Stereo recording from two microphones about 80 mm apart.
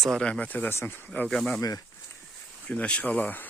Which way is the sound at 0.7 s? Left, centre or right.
Left.